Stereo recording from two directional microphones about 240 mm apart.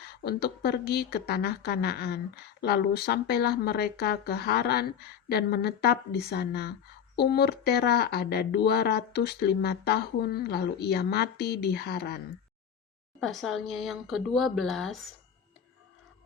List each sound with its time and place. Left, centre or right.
0.0 s speech: left
13.1 s speech: centre